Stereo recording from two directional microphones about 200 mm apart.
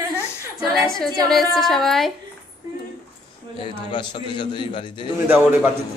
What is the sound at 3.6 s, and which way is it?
A man's voice, 25° left (ahead or behind).